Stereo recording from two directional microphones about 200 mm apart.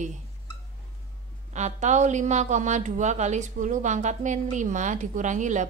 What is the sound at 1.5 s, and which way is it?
A woman's voice, 35° right (ahead or behind).